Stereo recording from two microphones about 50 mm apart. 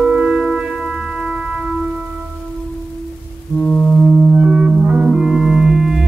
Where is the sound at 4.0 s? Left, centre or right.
Centre.